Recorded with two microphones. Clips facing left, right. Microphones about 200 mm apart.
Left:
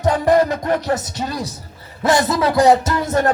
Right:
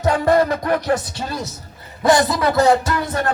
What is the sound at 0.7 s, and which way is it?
Music, 20° left (ahead or behind).